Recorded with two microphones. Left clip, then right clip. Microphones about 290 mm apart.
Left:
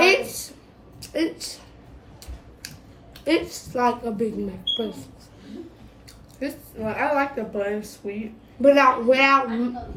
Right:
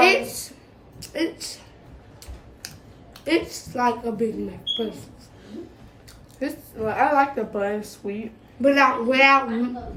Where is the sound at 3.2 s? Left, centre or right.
Centre.